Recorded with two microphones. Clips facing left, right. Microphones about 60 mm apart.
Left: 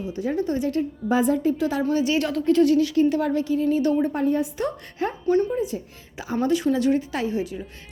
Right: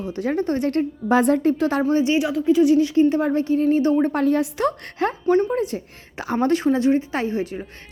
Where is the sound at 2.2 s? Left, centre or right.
Centre; by 3.9 s right.